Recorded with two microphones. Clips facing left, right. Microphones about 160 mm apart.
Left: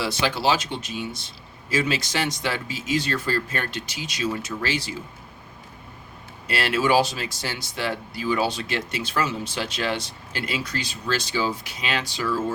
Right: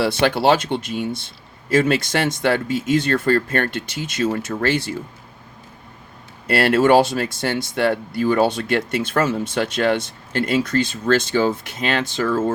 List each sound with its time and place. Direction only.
0.0 s speech: 55° right (ahead or behind)
6.5 s speech: 55° right (ahead or behind)